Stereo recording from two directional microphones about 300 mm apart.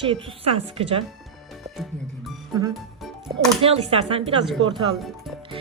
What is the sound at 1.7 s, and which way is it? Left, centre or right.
Music, centre.